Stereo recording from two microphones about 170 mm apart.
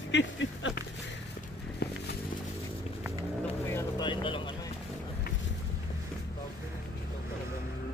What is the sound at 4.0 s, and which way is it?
Vehicle, 30° left (ahead or behind).